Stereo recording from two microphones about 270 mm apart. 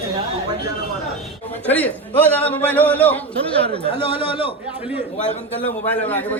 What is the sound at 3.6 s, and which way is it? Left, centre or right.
Speech, right.